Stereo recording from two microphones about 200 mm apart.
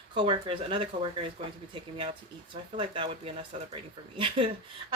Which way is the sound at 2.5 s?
25° right (ahead or behind).